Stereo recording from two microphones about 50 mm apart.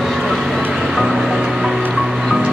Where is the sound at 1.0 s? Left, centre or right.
Centre.